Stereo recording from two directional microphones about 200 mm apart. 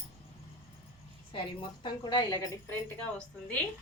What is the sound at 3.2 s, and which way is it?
Speech, 5° left (ahead or behind).